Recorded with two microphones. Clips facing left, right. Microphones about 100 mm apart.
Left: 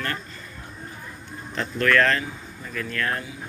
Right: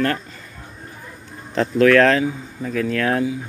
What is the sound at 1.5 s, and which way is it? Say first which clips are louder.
Speech: right 8 dB; 90° right.